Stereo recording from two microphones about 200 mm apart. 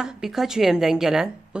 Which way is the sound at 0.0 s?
5° right (ahead or behind).